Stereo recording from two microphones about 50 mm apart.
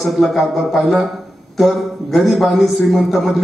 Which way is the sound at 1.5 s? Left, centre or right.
Centre.